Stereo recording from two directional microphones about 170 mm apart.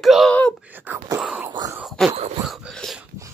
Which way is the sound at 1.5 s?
20° right (ahead or behind).